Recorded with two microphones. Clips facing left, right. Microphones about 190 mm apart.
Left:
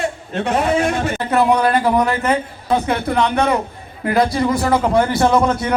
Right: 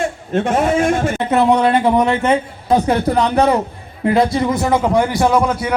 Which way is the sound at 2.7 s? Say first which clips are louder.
Right 3 dB; 40° right (ahead or behind).